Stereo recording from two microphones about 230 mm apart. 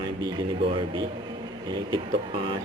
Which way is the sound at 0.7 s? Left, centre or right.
Right.